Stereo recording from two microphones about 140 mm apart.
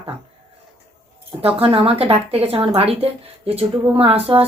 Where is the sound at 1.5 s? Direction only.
45° right (ahead or behind).